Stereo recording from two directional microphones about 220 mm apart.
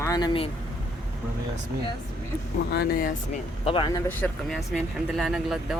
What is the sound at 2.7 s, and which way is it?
Speech, 40° left (ahead or behind).